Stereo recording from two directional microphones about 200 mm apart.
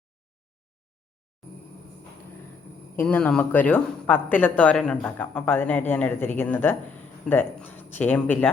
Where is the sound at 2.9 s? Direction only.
10° left (ahead or behind).